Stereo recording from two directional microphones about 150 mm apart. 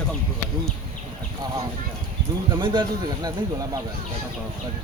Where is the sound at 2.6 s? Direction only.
30° right (ahead or behind).